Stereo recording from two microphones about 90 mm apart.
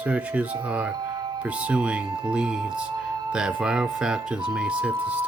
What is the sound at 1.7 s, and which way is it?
Speech, 10° right (ahead or behind).